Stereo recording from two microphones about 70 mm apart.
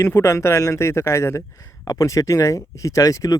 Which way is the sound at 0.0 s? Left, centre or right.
Left.